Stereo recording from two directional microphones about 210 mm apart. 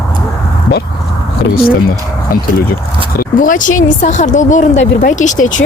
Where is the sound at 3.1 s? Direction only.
40° left (ahead or behind).